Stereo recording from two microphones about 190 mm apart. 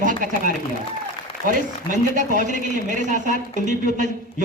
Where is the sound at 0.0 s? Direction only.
45° right (ahead or behind).